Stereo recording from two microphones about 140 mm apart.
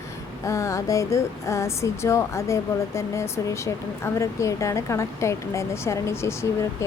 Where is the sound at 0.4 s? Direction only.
20° left (ahead or behind).